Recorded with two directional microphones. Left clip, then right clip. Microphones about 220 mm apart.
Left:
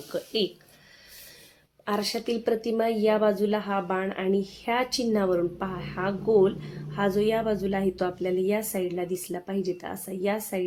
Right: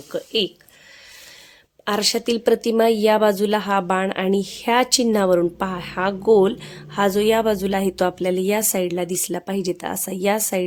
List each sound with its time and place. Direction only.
0.1 s speech: 25° right (ahead or behind)
1.8 s speech: 45° right (ahead or behind)